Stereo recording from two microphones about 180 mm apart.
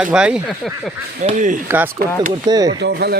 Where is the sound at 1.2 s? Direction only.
40° right (ahead or behind).